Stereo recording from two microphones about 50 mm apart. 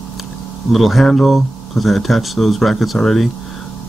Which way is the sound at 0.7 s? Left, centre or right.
Centre.